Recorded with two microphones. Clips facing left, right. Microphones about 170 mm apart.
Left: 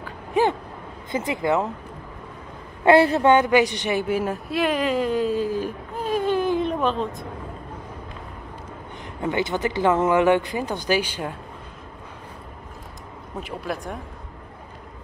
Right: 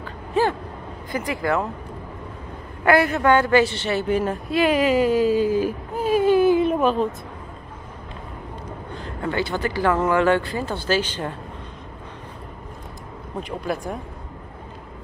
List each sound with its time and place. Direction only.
0.0 s a sound: 15° left (ahead or behind)
1.1 s speech: 20° left (ahead or behind)
2.8 s a woman's voice: 30° left (ahead or behind); by 7.2 s 5° right (ahead or behind)
8.9 s speech: 20° left (ahead or behind)
13.4 s a woman's voice: centre (ahead or behind)